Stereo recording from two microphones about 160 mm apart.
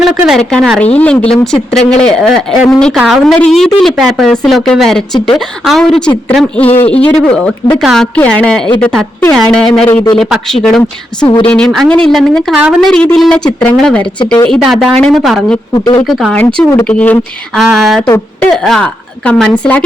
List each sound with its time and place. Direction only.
0.3 s a woman's voice: centre (ahead or behind)
10.2 s a woman's voice: centre (ahead or behind)